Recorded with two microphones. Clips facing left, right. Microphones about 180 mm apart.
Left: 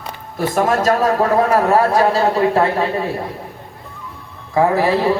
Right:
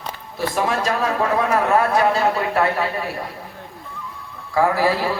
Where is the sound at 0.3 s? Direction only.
45° left (ahead or behind); by 3.1 s 30° left (ahead or behind).